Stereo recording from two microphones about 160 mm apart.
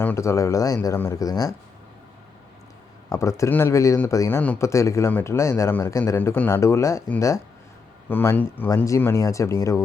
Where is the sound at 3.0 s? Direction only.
20° left (ahead or behind).